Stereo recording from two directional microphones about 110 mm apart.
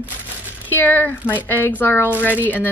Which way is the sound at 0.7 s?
15° left (ahead or behind).